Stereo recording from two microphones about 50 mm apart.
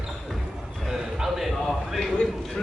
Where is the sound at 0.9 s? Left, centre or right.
Centre.